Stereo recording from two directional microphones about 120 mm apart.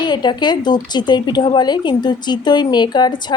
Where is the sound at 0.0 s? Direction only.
40° left (ahead or behind).